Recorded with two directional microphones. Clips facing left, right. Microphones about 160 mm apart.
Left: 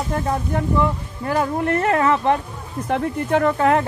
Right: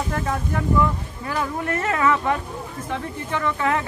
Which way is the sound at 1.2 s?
40° left (ahead or behind).